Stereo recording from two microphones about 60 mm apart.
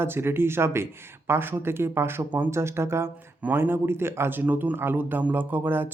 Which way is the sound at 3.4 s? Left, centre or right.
Right.